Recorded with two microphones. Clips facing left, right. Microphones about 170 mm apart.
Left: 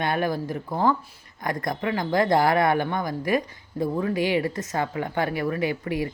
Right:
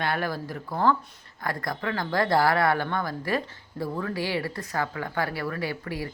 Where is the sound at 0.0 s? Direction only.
20° left (ahead or behind).